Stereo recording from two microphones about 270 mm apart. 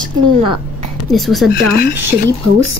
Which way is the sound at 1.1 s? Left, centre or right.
Centre.